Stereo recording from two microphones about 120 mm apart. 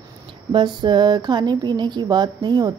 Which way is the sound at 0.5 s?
40° right (ahead or behind).